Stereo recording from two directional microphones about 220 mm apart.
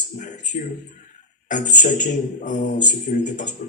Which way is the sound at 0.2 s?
35° left (ahead or behind).